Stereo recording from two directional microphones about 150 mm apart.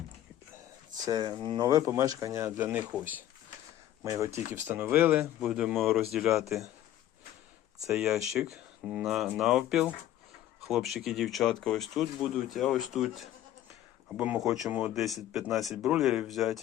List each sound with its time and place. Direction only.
1.0 s speech: 25° right (ahead or behind)
2.6 s speech: 10° right (ahead or behind)
7.9 s speech: 5° right (ahead or behind)